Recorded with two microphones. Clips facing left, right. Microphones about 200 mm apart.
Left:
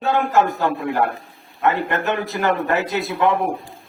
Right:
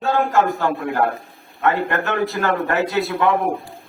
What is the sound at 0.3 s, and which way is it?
A man's voice, 20° left (ahead or behind).